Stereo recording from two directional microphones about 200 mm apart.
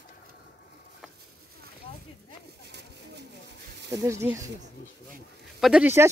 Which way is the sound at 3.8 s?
15° right (ahead or behind).